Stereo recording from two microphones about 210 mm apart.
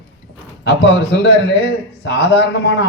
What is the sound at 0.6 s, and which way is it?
A man's voice, 55° left (ahead or behind).